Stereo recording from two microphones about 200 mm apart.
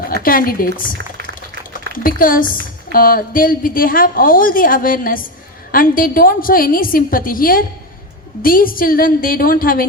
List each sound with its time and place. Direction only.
0.1 s a woman's voice: 45° left (ahead or behind)
2.0 s a woman's voice: 45° left (ahead or behind)